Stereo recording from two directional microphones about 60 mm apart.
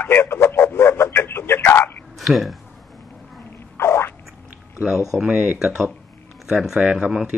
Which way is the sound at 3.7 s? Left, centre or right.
Left.